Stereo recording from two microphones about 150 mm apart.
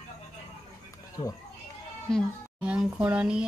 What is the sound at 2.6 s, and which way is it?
Speech, 5° right (ahead or behind).